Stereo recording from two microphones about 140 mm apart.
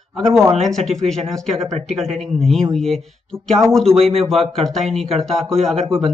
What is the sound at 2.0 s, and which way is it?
Speech, centre (ahead or behind).